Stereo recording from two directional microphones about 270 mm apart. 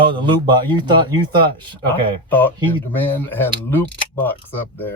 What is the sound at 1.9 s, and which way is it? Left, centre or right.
Speech, centre.